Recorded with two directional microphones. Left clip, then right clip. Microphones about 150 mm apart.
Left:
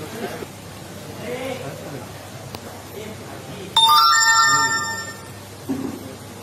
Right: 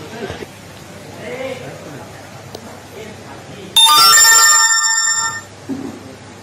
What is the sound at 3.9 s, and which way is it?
Ringtone, 75° right (ahead or behind).